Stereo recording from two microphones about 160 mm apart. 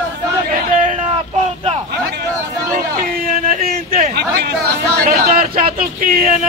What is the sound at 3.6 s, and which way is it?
Chatter, 65° right (ahead or behind).